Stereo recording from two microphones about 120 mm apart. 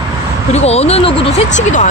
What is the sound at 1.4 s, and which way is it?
Speech, 90° left.